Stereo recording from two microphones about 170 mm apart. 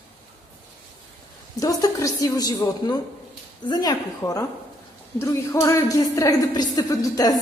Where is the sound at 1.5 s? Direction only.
20° left (ahead or behind).